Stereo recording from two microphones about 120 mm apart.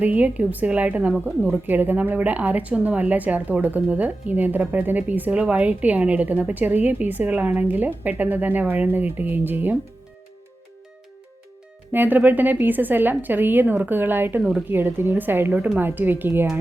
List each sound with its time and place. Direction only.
0.0 s a woman's voice: 10° right (ahead or behind)
11.9 s a woman's voice: 15° right (ahead or behind)